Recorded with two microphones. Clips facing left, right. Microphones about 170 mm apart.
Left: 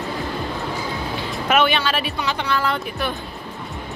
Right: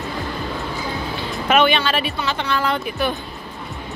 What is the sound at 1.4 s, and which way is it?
Speech, 5° left (ahead or behind).